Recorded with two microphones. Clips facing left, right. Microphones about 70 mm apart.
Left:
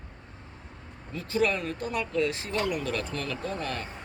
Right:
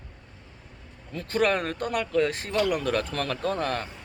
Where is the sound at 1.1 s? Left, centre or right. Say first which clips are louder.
Right 2 dB; right.